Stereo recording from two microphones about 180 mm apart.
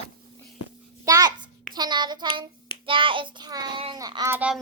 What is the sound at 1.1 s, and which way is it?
A child's voice, 20° right (ahead or behind).